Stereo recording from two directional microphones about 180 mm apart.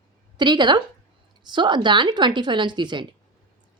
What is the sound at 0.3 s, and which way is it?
A woman's voice, 25° right (ahead or behind).